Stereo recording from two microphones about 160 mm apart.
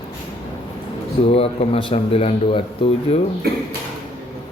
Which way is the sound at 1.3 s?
40° left (ahead or behind).